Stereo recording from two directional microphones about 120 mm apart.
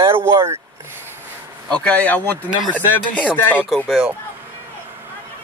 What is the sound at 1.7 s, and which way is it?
Speech, 10° left (ahead or behind).